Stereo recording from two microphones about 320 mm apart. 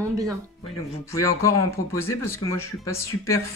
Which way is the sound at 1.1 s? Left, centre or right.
Centre.